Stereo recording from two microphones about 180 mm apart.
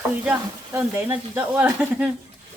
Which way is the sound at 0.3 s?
10° right (ahead or behind).